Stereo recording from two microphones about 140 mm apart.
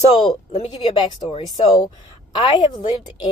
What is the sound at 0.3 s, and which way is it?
Speech, 50° left (ahead or behind).